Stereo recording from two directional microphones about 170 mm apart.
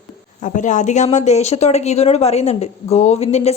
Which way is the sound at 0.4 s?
45° left (ahead or behind).